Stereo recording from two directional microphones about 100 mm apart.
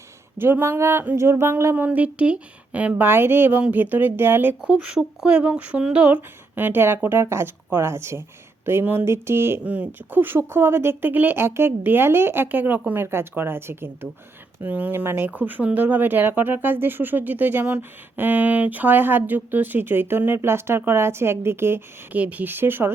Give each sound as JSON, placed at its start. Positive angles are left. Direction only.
{"t": 0.3, "sound": "speech", "side_deg": -20}